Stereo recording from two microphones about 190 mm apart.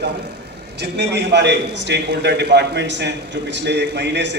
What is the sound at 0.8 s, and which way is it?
A man's voice, 65° right (ahead or behind).